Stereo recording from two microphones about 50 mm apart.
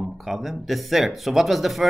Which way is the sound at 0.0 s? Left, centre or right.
Centre.